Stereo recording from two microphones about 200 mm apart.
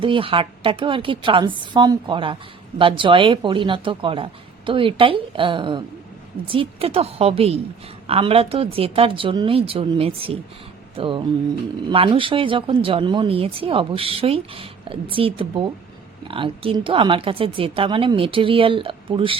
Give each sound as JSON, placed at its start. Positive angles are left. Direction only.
{"t": 0.0, "sound": "a woman's voice", "side_deg": -25}